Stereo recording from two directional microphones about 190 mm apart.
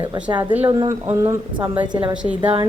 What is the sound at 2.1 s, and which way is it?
Speech, 5° right (ahead or behind).